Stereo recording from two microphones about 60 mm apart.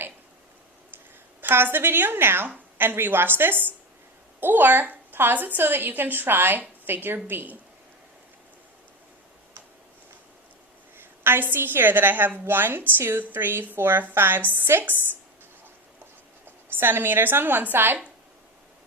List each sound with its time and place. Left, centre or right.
1.4 s a woman's voice: right
10.9 s a woman's voice: right
16.7 s a woman's voice: right